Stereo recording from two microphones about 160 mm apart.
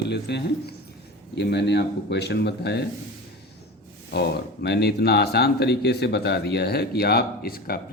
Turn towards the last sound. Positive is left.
turn(degrees=70)  # may be behind; listen again after turning